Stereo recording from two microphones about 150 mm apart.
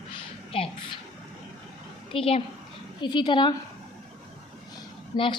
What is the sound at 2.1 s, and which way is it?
A woman's voice, 40° left (ahead or behind).